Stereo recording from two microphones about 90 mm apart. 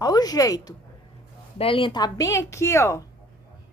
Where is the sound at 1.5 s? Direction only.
85° left; by 3.1 s 35° left (ahead or behind).